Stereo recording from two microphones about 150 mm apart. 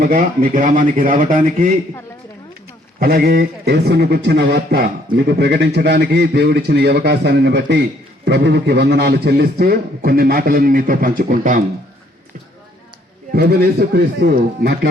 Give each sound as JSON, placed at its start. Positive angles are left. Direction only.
{"t": 0.0, "sound": "speech", "side_deg": -70}
{"t": 3.0, "sound": "a man's voice", "side_deg": -90}
{"t": 13.3, "sound": "a man's voice", "side_deg": -90}